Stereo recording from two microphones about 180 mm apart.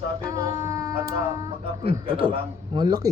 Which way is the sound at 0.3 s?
20° right (ahead or behind).